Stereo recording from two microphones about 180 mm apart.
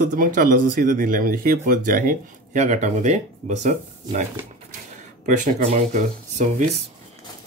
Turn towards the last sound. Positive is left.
turn(degrees=-45)  # may be behind; listen again after turning